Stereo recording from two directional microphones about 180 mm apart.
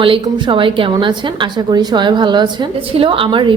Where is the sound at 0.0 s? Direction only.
30° right (ahead or behind).